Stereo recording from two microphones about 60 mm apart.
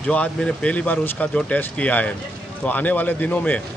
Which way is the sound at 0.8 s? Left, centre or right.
Left.